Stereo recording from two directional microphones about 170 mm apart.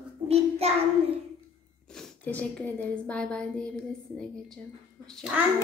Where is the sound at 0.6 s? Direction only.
35° right (ahead or behind).